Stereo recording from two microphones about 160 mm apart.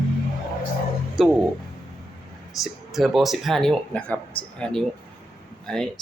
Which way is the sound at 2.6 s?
Centre (ahead or behind).